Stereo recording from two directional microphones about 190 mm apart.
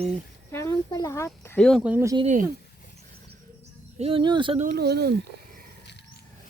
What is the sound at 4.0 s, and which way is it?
Speech, 30° right (ahead or behind).